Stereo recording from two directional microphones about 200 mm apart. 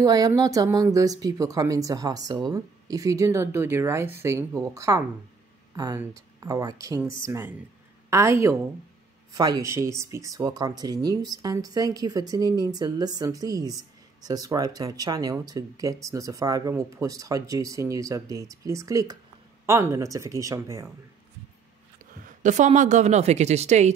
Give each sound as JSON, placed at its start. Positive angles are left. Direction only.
{"t": 0.0, "sound": "speech", "side_deg": -20}
{"t": 21.9, "sound": "speech", "side_deg": -40}